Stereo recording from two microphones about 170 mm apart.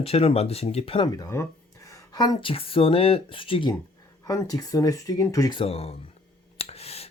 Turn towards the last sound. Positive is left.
turn(degrees=35)  # may be behind; listen again after turning